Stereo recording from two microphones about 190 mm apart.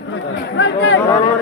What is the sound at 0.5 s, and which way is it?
Speech, 80° left.